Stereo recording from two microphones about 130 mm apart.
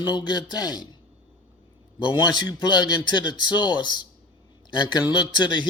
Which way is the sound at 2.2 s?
35° left (ahead or behind).